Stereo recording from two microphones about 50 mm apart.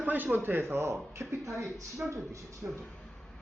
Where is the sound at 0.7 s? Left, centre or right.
Right.